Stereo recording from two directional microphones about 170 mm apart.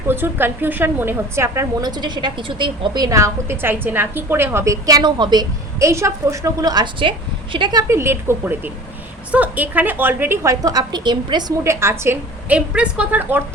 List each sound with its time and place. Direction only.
0.1 s a woman's voice: 15° right (ahead or behind)